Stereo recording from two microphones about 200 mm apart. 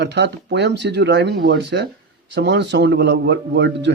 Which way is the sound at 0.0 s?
55° right (ahead or behind).